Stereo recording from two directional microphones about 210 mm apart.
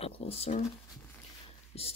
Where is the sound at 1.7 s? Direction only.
30° left (ahead or behind).